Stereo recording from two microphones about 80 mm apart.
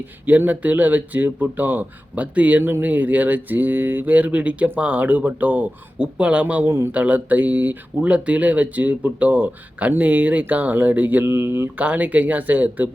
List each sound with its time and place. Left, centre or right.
0.3 s speech: right
11.8 s speech: centre